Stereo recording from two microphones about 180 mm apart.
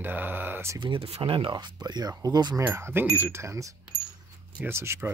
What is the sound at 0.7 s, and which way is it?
Speech, 30° right (ahead or behind).